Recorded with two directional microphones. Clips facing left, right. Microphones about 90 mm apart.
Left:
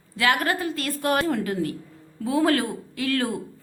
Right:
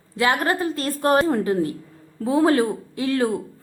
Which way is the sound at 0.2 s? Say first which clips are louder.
Right 2 dB; 25° right (ahead or behind).